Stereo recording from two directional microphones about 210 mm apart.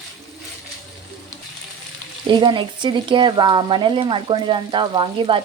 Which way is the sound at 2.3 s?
20° right (ahead or behind).